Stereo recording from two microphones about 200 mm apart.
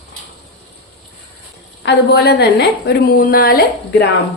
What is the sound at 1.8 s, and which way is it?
A woman's voice, 55° left (ahead or behind).